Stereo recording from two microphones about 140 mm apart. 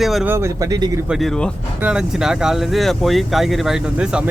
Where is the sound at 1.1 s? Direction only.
Centre (ahead or behind).